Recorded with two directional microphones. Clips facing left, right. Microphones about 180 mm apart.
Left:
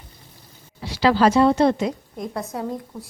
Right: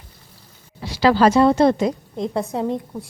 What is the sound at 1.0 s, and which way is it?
Speech, 45° right (ahead or behind).